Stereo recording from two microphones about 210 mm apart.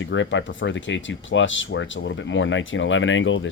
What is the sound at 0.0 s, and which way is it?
Speech, 60° left (ahead or behind).